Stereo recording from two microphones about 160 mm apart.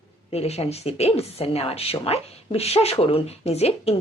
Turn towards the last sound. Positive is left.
turn(degrees=40)  # may be behind; listen again after turning